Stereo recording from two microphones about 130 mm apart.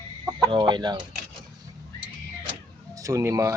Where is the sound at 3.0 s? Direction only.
25° right (ahead or behind).